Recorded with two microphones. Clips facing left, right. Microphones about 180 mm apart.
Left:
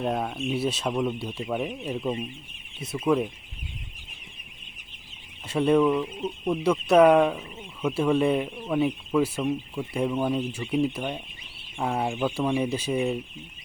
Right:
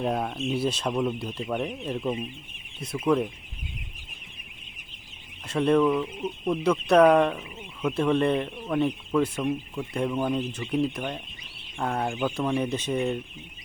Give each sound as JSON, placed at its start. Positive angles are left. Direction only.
{"t": 0.0, "sound": "speech", "side_deg": 0}
{"t": 5.5, "sound": "speech", "side_deg": 5}